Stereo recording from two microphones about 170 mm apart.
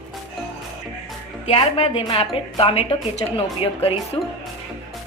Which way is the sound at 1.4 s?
35° left (ahead or behind).